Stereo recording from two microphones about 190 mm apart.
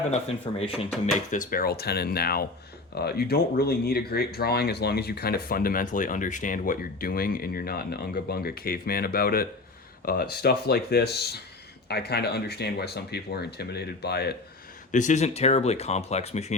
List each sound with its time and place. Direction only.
0.5 s speech: 30° left (ahead or behind)
1.3 s speech: 45° left (ahead or behind)
14.9 s speech: 40° left (ahead or behind)